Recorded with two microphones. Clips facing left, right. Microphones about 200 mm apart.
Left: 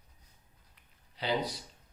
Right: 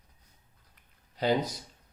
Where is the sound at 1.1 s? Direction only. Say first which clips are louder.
Right 5 dB; 45° right (ahead or behind).